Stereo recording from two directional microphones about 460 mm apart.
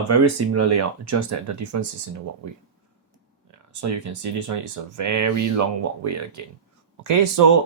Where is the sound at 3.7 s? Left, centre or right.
Right.